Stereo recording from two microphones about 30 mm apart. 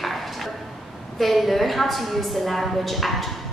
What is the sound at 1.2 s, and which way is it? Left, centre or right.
A woman's voice, centre.